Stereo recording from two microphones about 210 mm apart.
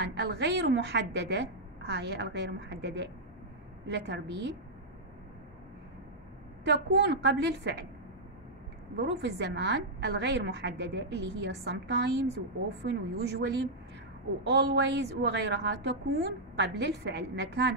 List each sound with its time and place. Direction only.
0.0 s a woman's voice: 55° right (ahead or behind)
6.6 s a woman's voice: 55° right (ahead or behind)
8.9 s a woman's voice: 55° right (ahead or behind)